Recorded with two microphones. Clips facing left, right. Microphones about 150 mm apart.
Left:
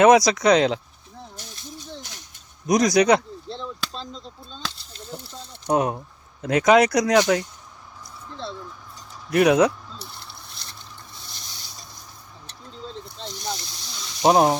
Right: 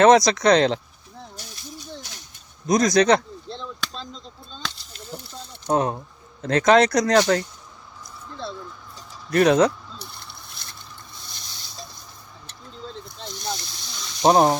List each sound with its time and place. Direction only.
0.0 s speech: 10° left (ahead or behind)
1.4 s rattle: 20° left (ahead or behind)
2.6 s speech: 10° left (ahead or behind)
9.3 s a sound: 10° left (ahead or behind)
13.2 s snake: centre (ahead or behind)